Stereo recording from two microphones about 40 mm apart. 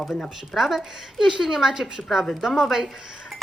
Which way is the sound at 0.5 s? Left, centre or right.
Centre.